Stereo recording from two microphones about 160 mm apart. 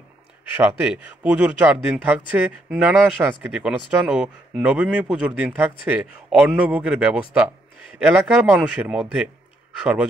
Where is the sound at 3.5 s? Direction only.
5° right (ahead or behind).